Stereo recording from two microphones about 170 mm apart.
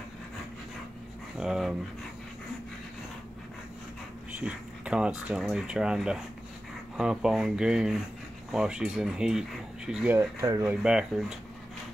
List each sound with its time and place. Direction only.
1.4 s speech: 5° right (ahead or behind)
4.4 s speech: 5° right (ahead or behind)
10.1 s speech: 20° right (ahead or behind)
10.6 s speech: 5° right (ahead or behind)